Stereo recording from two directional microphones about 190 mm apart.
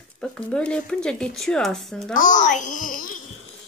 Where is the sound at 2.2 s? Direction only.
40° left (ahead or behind).